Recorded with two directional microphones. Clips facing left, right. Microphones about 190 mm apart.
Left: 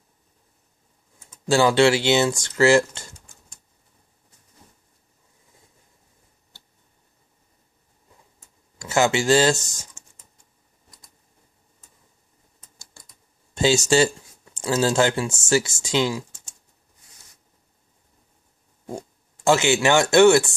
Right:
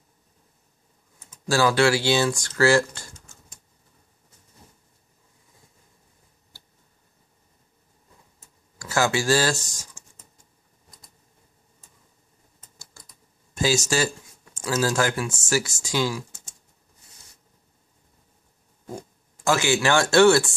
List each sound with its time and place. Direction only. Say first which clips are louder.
1.5 s speech: left 3 dB; 25° left (ahead or behind)
8.7 s speech: left 3 dB; 20° left (ahead or behind)
13.6 s speech: left 5 dB; 25° left (ahead or behind)
18.9 s speech: left 3 dB; 25° left (ahead or behind)